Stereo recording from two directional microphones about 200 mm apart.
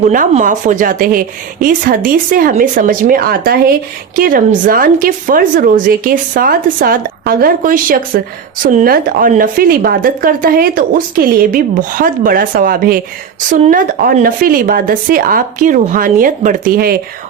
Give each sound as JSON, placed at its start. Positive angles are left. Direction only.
{"t": 0.1, "sound": "speech", "side_deg": -40}